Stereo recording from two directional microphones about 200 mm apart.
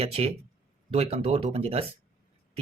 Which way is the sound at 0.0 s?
30° right (ahead or behind).